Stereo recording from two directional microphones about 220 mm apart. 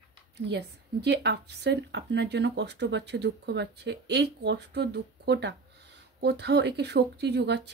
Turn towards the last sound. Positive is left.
turn(degrees=-50)  # may be behind; listen again after turning